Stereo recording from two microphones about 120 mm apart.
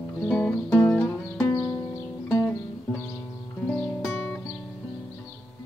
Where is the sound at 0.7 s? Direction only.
15° left (ahead or behind).